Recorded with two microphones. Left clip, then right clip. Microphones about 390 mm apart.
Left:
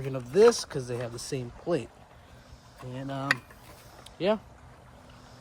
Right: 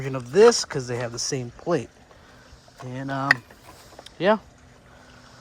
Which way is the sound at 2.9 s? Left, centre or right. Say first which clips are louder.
Right 7 dB; centre.